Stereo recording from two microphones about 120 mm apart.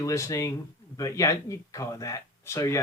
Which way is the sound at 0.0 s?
25° left (ahead or behind).